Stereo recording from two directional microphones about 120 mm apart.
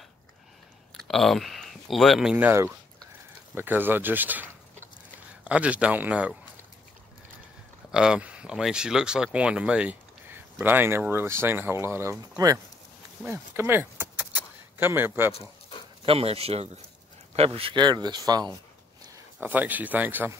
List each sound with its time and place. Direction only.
0.9 s speech: centre (ahead or behind)
2.3 s speech: 20° right (ahead or behind)
7.9 s speech: 5° right (ahead or behind); by 12.5 s 25° right (ahead or behind)
13.2 s keys jangling: 15° right (ahead or behind)
16.1 s speech: 55° right (ahead or behind); by 18.5 s 35° right (ahead or behind)
19.4 s speech: 15° right (ahead or behind)